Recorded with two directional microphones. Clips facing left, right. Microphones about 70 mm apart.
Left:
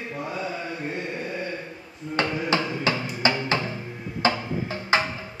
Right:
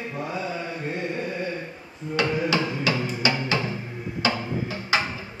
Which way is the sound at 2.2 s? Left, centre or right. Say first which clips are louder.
Right 1 dB; left.